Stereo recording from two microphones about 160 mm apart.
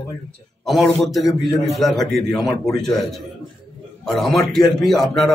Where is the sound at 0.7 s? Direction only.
Centre (ahead or behind).